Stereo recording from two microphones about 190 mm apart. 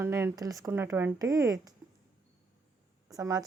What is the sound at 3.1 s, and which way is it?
Speech, 20° right (ahead or behind).